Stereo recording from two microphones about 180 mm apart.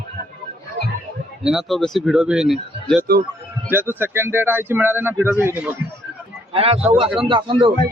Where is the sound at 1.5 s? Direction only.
Centre (ahead or behind).